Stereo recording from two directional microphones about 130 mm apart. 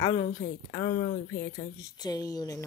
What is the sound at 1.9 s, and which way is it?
Speech, 30° left (ahead or behind).